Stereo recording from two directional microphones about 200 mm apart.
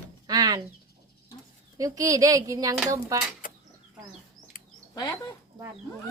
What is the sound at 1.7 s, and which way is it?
Speech, 15° right (ahead or behind).